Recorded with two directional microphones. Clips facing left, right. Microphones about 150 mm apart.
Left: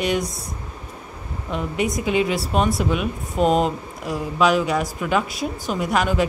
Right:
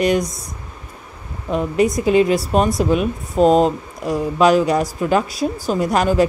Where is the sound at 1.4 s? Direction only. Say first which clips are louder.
Right 7 dB; 40° right (ahead or behind).